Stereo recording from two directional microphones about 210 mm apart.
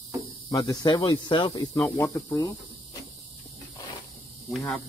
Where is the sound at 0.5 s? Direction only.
20° left (ahead or behind).